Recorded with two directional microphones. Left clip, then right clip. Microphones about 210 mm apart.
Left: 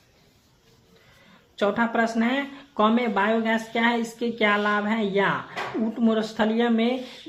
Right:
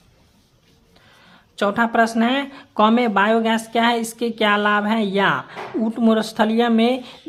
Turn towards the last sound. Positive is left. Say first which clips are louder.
# right 5 dB
turn(degrees=-40)  # may be behind; listen again after turning